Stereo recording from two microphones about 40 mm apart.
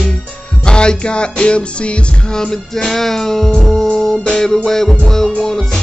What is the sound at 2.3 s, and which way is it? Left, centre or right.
Music, centre.